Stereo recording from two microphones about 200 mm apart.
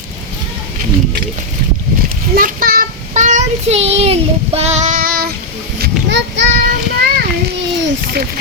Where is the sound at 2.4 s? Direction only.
45° right (ahead or behind).